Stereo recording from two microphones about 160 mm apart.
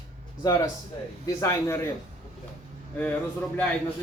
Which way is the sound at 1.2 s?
20° left (ahead or behind).